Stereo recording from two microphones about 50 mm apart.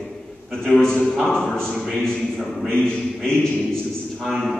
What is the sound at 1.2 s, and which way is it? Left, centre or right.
Speech, centre.